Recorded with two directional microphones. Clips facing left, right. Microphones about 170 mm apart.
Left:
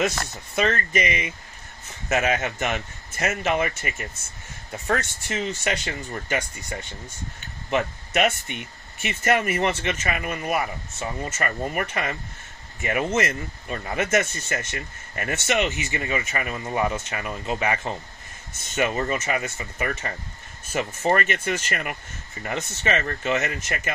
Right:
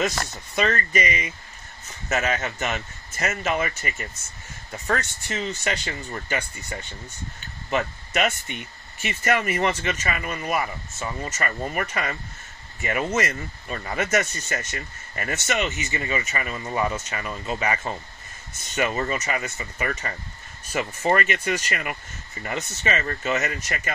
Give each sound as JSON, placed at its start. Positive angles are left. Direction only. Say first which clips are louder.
{"t": 0.6, "sound": "speech", "louder": "even", "side_deg": 50}
{"t": 4.8, "sound": "speech", "louder": "left 1 dB", "side_deg": 50}